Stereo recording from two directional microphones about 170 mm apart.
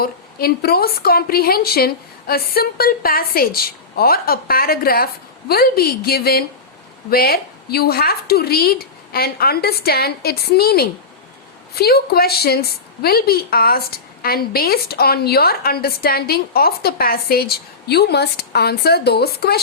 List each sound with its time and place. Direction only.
0.0 s a woman's voice: 65° left (ahead or behind)